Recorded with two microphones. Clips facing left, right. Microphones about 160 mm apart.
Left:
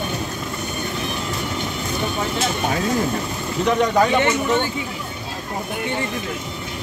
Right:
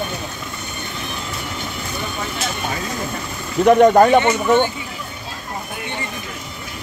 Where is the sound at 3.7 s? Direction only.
50° right (ahead or behind).